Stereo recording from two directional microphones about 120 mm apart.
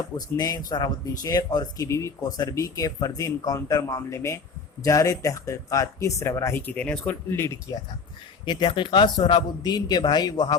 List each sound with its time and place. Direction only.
0.3 s speech: 30° left (ahead or behind); by 7.2 s 10° left (ahead or behind)
7.3 s speech: 20° left (ahead or behind)
8.4 s speech: 40° left (ahead or behind)